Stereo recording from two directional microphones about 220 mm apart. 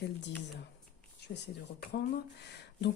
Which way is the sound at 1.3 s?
45° left (ahead or behind).